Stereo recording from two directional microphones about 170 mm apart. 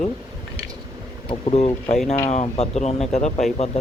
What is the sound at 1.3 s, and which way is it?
Speech, 35° left (ahead or behind).